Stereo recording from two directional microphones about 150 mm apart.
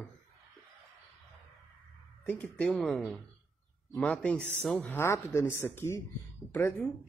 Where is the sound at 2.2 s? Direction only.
10° left (ahead or behind).